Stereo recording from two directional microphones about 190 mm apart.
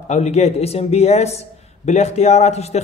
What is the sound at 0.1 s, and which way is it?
A man's voice, 35° left (ahead or behind).